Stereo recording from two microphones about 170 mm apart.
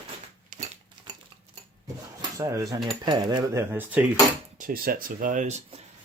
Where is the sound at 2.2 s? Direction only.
20° right (ahead or behind).